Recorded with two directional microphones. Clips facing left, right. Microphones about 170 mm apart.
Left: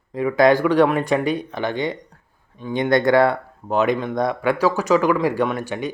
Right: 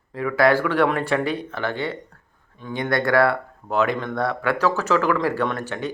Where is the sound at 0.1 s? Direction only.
20° left (ahead or behind).